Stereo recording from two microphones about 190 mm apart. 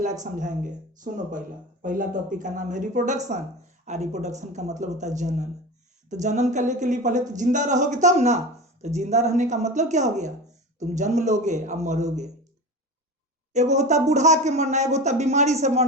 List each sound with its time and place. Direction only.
0.2 s a man's voice: 40° right (ahead or behind)
13.5 s a man's voice: 40° right (ahead or behind)